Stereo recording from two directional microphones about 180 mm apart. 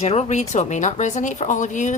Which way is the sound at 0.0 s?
35° left (ahead or behind).